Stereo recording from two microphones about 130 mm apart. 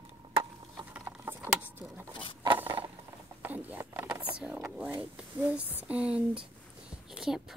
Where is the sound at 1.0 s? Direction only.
20° right (ahead or behind).